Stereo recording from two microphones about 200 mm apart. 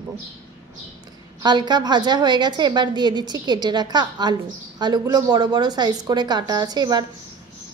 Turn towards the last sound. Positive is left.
turn(degrees=-20)  # may be behind; listen again after turning